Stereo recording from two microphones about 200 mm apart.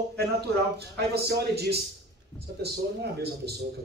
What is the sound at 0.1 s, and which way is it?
A man's voice, 55° right (ahead or behind).